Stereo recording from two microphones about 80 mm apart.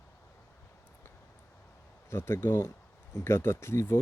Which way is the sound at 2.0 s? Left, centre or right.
Left.